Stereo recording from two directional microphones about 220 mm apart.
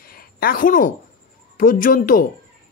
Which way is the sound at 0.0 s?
40° left (ahead or behind).